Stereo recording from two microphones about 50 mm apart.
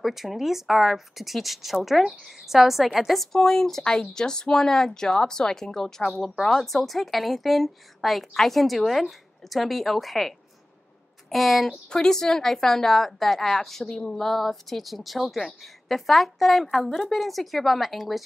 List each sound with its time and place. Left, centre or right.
0.0 s a woman's voice: centre
3.3 s a woman's voice: centre